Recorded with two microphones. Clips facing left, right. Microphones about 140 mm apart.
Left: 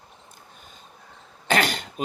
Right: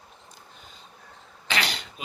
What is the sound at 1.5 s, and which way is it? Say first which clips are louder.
Cough: left 7 dB; 45° left (ahead or behind).